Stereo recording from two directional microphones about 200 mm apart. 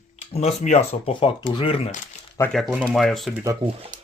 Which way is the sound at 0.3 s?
35° left (ahead or behind).